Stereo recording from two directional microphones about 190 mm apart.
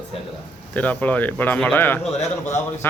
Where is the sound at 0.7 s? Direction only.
10° left (ahead or behind).